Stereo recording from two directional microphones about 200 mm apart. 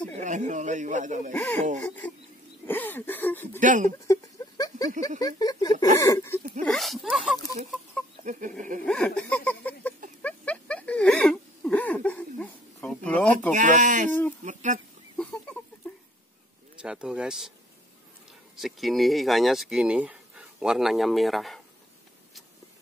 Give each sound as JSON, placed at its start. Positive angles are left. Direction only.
{"t": 0.1, "sound": "speech", "side_deg": -40}
{"t": 1.3, "sound": "speech", "side_deg": 10}
{"t": 3.5, "sound": "speech", "side_deg": -40}
{"t": 4.1, "sound": "a sound", "side_deg": 15}
{"t": 5.2, "sound": "speech", "side_deg": 20}
{"t": 6.6, "sound": "speech", "side_deg": 0}
{"t": 8.3, "sound": "speech", "side_deg": -40}
{"t": 8.8, "sound": "a sound", "side_deg": 5}
{"t": 13.5, "sound": "speech", "side_deg": -40}
{"t": 14.4, "sound": "a sound", "side_deg": -40}
{"t": 15.1, "sound": "a sound", "side_deg": 5}
{"t": 16.7, "sound": "speech", "side_deg": -5}
{"t": 18.6, "sound": "speech", "side_deg": 0}